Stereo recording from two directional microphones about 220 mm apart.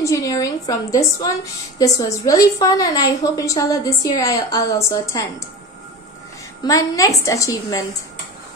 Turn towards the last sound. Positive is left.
turn(degrees=15)  # may be behind; listen again after turning